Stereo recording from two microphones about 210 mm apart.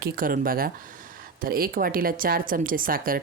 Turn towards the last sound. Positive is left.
turn(degrees=-40)  # may be behind; listen again after turning